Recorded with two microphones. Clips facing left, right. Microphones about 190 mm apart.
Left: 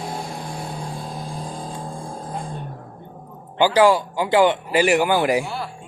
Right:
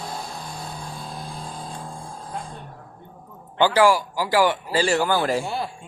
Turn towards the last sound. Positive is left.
turn(degrees=15)  # may be behind; listen again after turning